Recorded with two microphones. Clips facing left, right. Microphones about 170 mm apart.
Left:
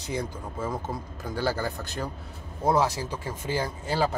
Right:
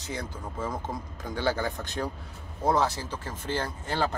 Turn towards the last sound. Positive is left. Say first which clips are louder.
# left 3 dB
turn(degrees=10)  # may be behind; listen again after turning